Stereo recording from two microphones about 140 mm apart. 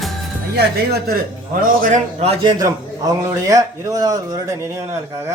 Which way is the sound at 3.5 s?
25° right (ahead or behind).